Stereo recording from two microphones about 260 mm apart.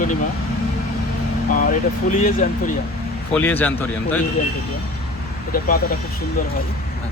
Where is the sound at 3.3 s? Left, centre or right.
Centre.